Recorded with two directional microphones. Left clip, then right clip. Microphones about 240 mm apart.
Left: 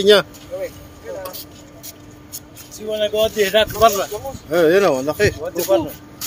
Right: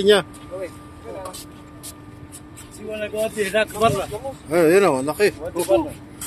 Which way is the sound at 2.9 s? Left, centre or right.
Left.